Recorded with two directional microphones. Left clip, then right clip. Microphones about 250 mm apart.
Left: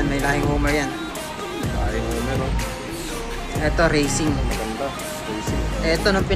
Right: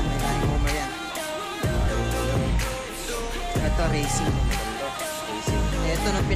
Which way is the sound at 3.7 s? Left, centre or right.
Centre.